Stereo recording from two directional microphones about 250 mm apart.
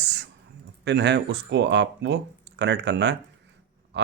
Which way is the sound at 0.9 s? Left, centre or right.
Right.